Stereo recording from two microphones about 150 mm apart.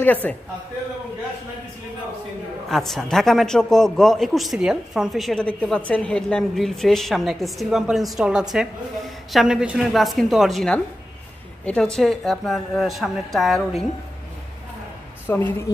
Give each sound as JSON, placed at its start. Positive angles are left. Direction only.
{"t": 0.0, "sound": "a man's voice", "side_deg": 10}
{"t": 2.7, "sound": "a man's voice", "side_deg": 0}
{"t": 15.3, "sound": "a man's voice", "side_deg": 15}